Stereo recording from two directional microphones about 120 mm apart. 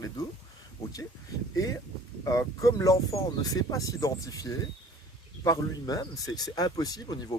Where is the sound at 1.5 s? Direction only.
25° left (ahead or behind).